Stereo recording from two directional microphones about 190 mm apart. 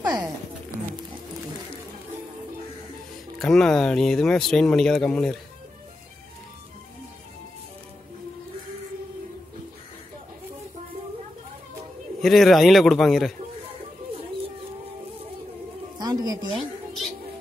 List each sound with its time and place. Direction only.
0.0 s a sound: 20° right (ahead or behind)
3.3 s speech: centre (ahead or behind)
12.2 s speech: centre (ahead or behind)
16.0 s speech: 20° right (ahead or behind)